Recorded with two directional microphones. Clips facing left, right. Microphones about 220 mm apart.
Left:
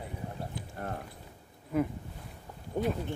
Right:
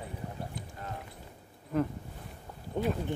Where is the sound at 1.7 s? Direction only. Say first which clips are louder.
Left 1 dB; 10° left (ahead or behind).